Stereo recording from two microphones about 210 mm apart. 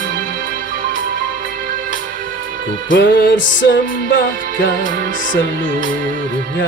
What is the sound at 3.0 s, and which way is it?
Music, 60° left (ahead or behind).